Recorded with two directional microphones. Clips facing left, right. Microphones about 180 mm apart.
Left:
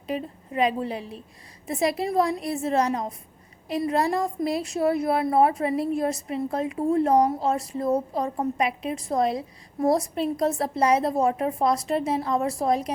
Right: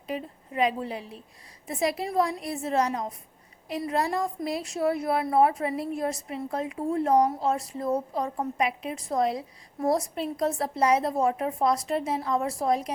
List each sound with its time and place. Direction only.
0.1 s a woman's voice: 30° left (ahead or behind)